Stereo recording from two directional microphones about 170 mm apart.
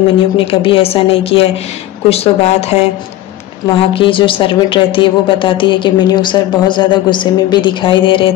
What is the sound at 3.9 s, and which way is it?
Speech, 30° left (ahead or behind).